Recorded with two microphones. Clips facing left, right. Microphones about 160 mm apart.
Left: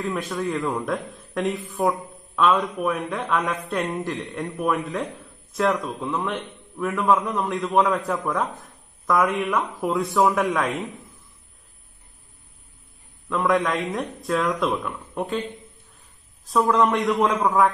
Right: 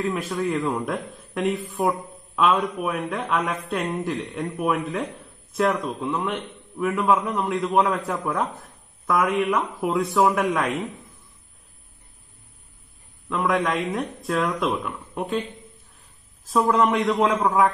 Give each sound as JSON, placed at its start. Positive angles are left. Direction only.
{"t": 0.0, "sound": "a man's voice", "side_deg": 0}
{"t": 13.3, "sound": "a man's voice", "side_deg": 0}
{"t": 16.4, "sound": "a man's voice", "side_deg": 0}